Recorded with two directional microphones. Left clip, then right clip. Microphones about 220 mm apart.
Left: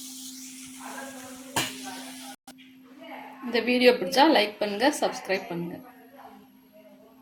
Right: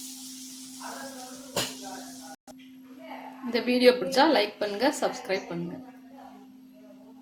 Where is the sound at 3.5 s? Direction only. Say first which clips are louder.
Left 1 dB; 10° left (ahead or behind).